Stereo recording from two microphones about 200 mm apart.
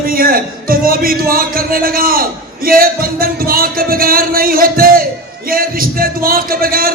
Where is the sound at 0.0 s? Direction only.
45° right (ahead or behind).